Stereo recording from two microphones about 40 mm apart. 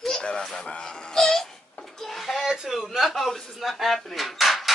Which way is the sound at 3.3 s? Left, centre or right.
Centre.